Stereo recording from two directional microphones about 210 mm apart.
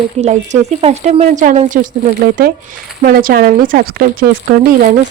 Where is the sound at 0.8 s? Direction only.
30° right (ahead or behind).